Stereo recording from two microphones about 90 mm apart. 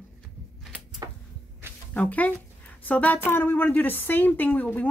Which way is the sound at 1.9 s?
15° left (ahead or behind).